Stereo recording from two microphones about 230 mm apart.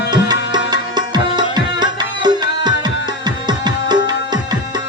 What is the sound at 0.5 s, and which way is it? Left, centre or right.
Tabla, centre.